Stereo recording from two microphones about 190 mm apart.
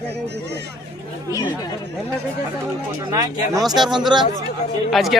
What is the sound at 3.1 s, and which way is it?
Speech, 20° right (ahead or behind).